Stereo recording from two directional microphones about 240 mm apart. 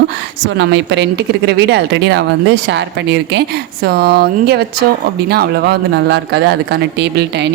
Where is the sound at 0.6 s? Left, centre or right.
Right.